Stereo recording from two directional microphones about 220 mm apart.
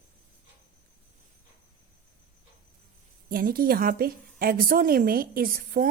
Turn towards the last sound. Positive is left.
turn(degrees=-40)  # may be behind; listen again after turning